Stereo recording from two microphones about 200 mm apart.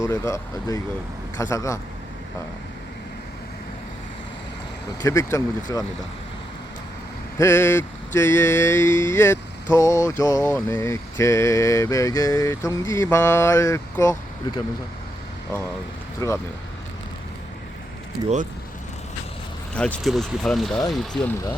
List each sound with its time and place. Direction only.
0.0 s mantra: 15° left (ahead or behind)
5.0 s mantra: 15° left (ahead or behind)
7.3 s mantra: 10° left (ahead or behind)
16.2 s mantra: 15° left (ahead or behind)
19.7 s speech: 5° left (ahead or behind)